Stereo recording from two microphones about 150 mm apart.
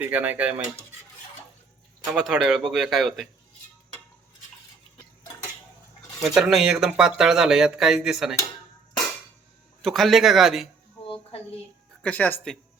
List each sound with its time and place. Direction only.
0.0 s speech: 10° right (ahead or behind)
2.0 s speech: 5° right (ahead or behind)
6.2 s speech: centre (ahead or behind)
9.8 s speech: centre (ahead or behind)
11.0 s a sound: 40° left (ahead or behind)
12.0 s speech: 10° left (ahead or behind)